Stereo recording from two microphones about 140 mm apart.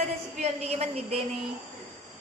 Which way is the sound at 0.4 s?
50° right (ahead or behind).